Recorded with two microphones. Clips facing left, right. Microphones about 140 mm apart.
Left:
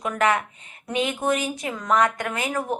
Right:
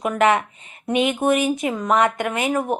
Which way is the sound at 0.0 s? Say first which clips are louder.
Right 4 dB; 20° right (ahead or behind).